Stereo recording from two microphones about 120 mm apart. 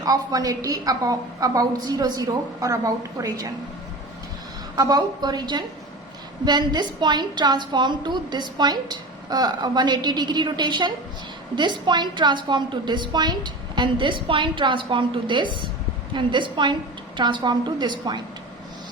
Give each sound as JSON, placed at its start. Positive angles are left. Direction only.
{"t": 0.0, "sound": "a woman's voice", "side_deg": -30}
{"t": 4.8, "sound": "a woman's voice", "side_deg": -35}